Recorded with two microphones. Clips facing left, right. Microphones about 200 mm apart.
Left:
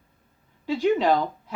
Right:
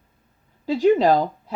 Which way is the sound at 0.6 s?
40° right (ahead or behind).